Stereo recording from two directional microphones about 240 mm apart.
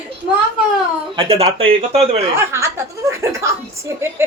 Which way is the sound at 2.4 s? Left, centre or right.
Centre.